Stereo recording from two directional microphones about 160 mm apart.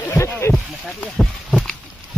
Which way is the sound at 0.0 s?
10° left (ahead or behind).